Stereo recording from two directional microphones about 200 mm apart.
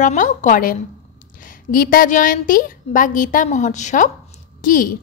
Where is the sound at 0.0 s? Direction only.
40° left (ahead or behind).